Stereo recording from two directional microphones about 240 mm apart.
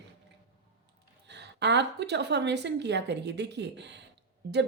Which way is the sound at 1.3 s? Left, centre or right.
Right.